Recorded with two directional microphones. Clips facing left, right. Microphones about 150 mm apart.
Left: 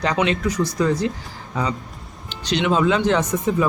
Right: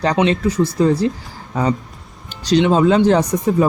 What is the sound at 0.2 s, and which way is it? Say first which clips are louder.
Speech: right 5 dB; 30° right (ahead or behind).